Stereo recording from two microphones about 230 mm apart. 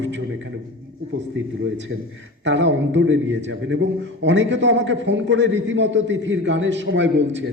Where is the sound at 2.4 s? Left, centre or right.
Right.